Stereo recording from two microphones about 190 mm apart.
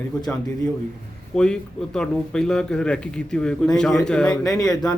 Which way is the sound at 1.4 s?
5° left (ahead or behind).